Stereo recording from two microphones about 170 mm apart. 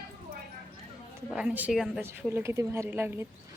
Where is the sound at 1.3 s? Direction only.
5° right (ahead or behind).